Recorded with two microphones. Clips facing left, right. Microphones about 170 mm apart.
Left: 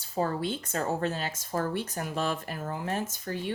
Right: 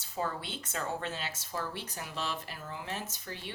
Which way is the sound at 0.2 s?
45° left (ahead or behind).